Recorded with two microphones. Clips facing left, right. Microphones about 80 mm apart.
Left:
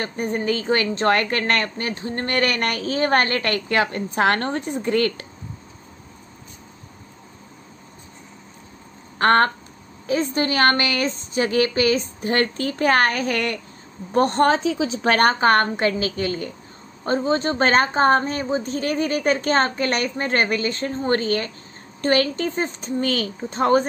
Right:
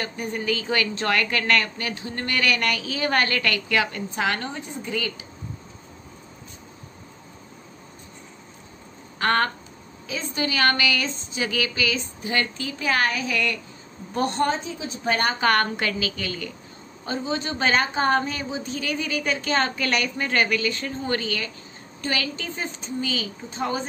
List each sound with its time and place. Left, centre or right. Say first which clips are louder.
0.0 s a woman's voice: left 4 dB; left
4.1 s a woman's voice: left 6 dB; left
9.2 s a woman's voice: left 5 dB; left
14.4 s a woman's voice: left 7 dB; left
15.4 s a woman's voice: left 4 dB; left